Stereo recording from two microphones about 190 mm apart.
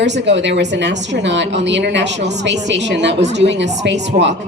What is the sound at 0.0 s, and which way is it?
A woman's voice, 70° right (ahead or behind).